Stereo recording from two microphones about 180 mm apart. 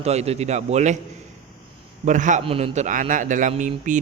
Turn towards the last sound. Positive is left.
turn(degrees=-45)  # may be behind; listen again after turning